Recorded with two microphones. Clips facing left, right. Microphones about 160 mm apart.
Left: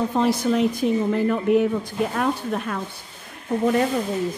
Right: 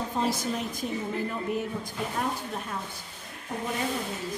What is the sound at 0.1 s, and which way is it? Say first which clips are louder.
A woman's voice: left 8 dB; 65° left (ahead or behind).